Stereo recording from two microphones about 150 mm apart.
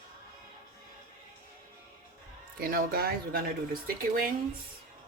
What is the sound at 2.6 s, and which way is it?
Speech, 80° right.